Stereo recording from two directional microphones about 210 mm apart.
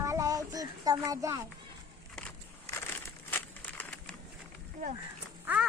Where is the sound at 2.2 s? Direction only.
5° left (ahead or behind).